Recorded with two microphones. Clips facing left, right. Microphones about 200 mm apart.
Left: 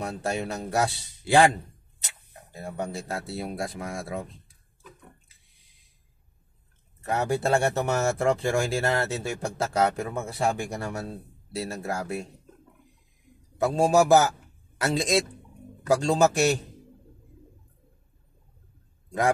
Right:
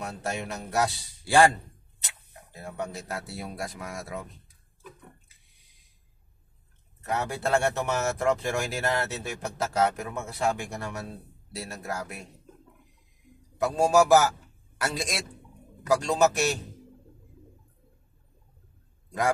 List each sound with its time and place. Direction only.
0.0 s speech: 30° left (ahead or behind)
2.6 s speech: 30° left (ahead or behind)
7.2 s speech: 35° left (ahead or behind)
13.7 s speech: 30° left (ahead or behind)